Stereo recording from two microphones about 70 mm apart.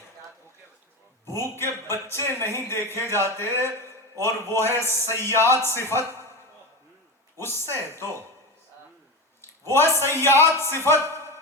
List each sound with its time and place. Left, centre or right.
1.3 s a man's voice: left
7.3 s a man's voice: left
9.4 s a sound: left
10.0 s a man's voice: left